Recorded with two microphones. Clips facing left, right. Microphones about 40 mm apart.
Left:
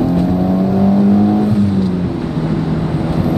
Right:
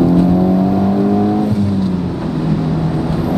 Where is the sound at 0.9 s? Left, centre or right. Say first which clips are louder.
Left 2 dB; centre.